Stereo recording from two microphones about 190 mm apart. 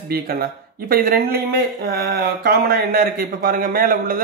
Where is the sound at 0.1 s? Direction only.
55° right (ahead or behind).